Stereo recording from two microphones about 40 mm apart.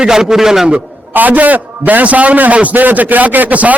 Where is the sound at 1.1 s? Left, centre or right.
Right.